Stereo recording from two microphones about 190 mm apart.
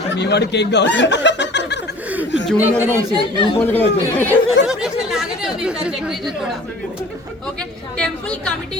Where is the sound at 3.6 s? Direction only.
10° left (ahead or behind).